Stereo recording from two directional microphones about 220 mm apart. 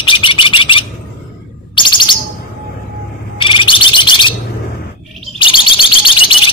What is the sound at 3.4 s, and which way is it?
Bird, 20° left (ahead or behind).